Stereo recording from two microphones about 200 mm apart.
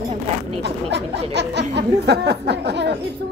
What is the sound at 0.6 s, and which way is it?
A woman's voice, 60° right (ahead or behind).